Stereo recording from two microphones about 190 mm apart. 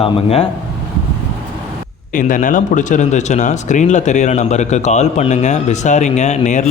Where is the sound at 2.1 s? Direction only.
45° left (ahead or behind).